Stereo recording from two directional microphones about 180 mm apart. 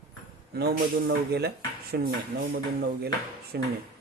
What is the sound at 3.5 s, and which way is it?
Speech, 65° right (ahead or behind).